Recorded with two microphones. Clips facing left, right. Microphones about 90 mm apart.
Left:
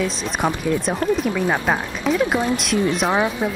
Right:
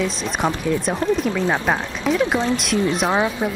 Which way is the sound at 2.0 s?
Centre (ahead or behind).